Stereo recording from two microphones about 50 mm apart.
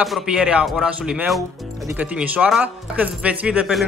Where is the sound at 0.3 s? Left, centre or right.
Centre.